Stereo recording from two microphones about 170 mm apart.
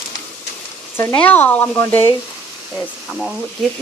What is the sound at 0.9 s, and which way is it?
Speech, 10° left (ahead or behind).